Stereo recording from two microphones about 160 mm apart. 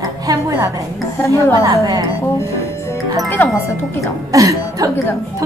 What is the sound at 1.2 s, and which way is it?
Music, 15° left (ahead or behind).